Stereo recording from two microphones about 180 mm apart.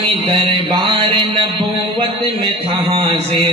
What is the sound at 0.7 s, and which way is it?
A man's voice, 25° right (ahead or behind).